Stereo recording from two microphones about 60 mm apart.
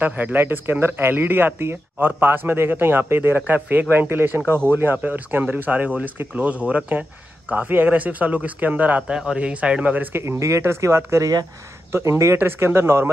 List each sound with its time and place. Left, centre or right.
0.0 s speech: right
3.3 s speech: right
9.0 s a man's voice: centre
10.1 s speech: right
11.9 s speech: right